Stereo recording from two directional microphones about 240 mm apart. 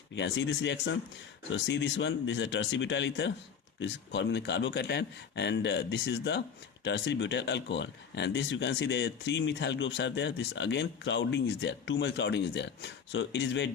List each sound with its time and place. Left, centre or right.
0.2 s speech: left